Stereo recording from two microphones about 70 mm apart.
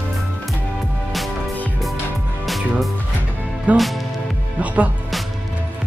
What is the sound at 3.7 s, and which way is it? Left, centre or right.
Speech, right.